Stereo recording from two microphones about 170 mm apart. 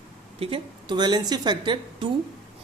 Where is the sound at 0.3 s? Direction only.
35° right (ahead or behind).